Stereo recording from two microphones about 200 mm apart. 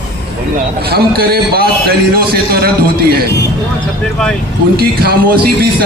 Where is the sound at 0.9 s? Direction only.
50° right (ahead or behind).